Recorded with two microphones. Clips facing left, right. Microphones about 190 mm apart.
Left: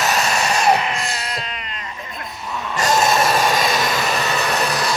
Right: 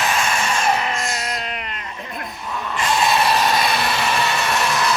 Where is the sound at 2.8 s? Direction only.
45° left (ahead or behind).